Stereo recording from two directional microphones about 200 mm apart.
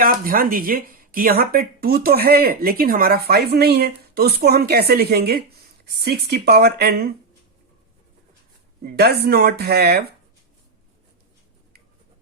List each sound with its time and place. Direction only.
0.0 s speech: 45° right (ahead or behind)
8.8 s speech: 50° right (ahead or behind)